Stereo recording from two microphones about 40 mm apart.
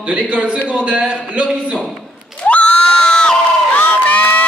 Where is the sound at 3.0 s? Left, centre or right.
Left.